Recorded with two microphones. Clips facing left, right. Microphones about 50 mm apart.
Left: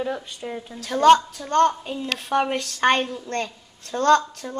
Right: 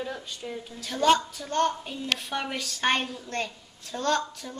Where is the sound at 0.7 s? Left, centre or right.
Left.